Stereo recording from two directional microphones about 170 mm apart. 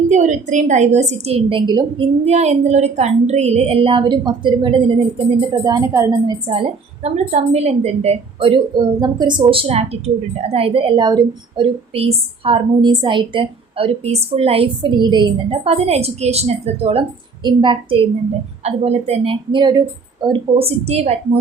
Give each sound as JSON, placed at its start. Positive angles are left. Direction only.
{"t": 0.1, "sound": "a woman's voice", "side_deg": -45}
{"t": 2.2, "sound": "a woman's voice", "side_deg": -40}
{"t": 5.4, "sound": "a woman's voice", "side_deg": -20}
{"t": 6.5, "sound": "a woman's voice", "side_deg": -35}